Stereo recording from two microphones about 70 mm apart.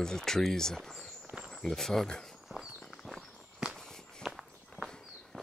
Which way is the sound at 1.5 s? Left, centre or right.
Centre.